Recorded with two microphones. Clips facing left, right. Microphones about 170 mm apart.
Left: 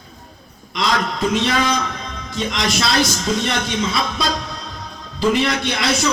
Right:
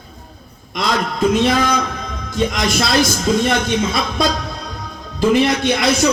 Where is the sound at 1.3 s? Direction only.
50° right (ahead or behind).